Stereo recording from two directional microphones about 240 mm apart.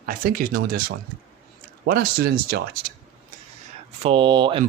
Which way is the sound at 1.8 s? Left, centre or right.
Right.